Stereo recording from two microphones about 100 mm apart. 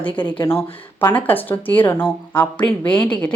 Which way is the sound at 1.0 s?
20° left (ahead or behind).